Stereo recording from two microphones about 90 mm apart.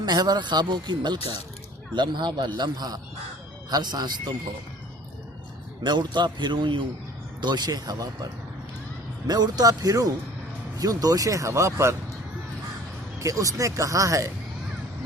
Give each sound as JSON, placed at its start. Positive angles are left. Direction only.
{"t": 0.0, "sound": "speech", "side_deg": -50}
{"t": 5.8, "sound": "speech", "side_deg": -55}
{"t": 7.4, "sound": "speech", "side_deg": -50}
{"t": 13.1, "sound": "speech", "side_deg": -40}